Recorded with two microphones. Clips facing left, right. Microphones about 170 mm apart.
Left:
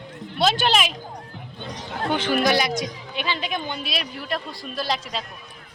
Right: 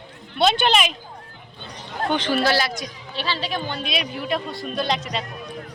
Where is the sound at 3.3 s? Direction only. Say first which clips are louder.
Right 1 dB; 35° right (ahead or behind).